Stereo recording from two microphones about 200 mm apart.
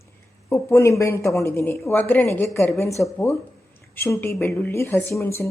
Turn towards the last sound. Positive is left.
turn(degrees=15)  # may be behind; listen again after turning